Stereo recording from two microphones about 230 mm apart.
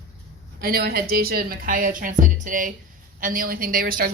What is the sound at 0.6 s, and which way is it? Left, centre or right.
Speech, right.